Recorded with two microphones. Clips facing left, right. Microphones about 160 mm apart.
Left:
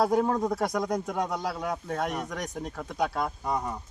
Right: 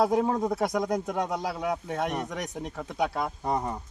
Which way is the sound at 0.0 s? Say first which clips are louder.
Even; 5° right (ahead or behind).